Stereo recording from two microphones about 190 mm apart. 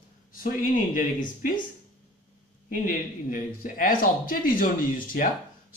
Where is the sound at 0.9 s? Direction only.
45° left (ahead or behind).